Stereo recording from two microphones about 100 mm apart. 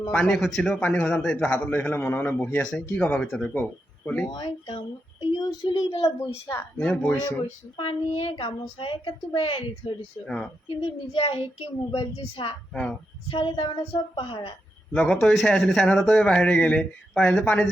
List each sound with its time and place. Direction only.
0.1 s speech: 10° left (ahead or behind)
4.4 s a woman's voice: 55° left (ahead or behind); by 5.9 s 40° left (ahead or behind)
6.7 s speech: 10° left (ahead or behind)
7.8 s a woman's voice: 80° left
10.2 s speech: 5° left (ahead or behind)
10.8 s a woman's voice: 75° left (ahead or behind)
11.9 s a woman's voice: 60° left (ahead or behind)
12.7 s speech: 10° left (ahead or behind)
13.3 s a woman's voice: 55° left (ahead or behind)
14.9 s speech: 10° left (ahead or behind)